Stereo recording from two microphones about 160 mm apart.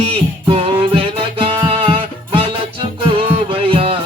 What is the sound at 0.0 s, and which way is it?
Music, 35° right (ahead or behind).